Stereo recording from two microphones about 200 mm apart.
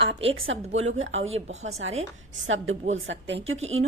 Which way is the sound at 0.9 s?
80° right.